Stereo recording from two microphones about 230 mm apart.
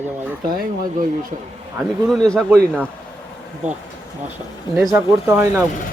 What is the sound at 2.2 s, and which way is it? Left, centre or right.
Speech, centre.